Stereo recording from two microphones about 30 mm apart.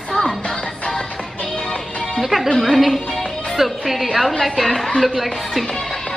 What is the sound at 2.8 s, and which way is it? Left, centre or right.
Speech, centre.